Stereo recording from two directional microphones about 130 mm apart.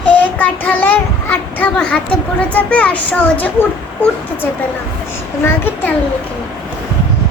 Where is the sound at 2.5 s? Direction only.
10° left (ahead or behind).